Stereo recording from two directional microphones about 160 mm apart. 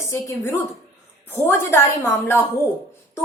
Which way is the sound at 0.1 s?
15° left (ahead or behind).